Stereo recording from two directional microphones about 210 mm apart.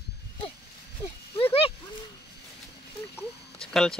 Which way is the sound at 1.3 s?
25° left (ahead or behind).